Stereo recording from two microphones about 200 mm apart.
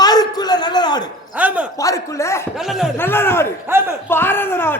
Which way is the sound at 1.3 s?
5° right (ahead or behind).